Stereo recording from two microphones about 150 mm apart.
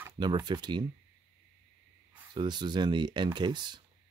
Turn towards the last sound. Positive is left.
turn(degrees=-30)  # may be behind; listen again after turning